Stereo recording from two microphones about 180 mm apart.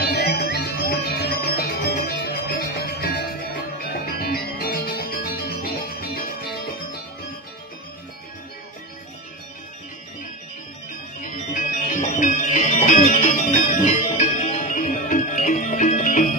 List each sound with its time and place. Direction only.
0.0 s music: 65° left (ahead or behind)
11.2 s music: 45° left (ahead or behind)